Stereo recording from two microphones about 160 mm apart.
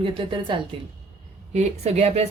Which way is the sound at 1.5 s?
40° right (ahead or behind).